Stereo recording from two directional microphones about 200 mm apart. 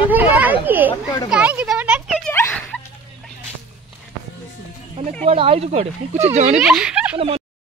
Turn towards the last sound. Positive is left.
turn(degrees=-25)  # may be behind; listen again after turning